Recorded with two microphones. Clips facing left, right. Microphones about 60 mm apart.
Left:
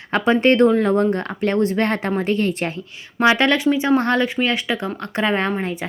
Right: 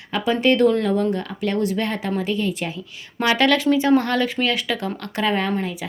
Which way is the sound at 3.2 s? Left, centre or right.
Left.